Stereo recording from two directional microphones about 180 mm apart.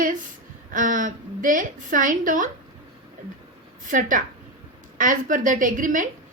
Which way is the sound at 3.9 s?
45° right (ahead or behind).